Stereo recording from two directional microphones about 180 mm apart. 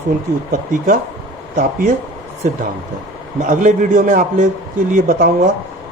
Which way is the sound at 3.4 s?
45° right (ahead or behind).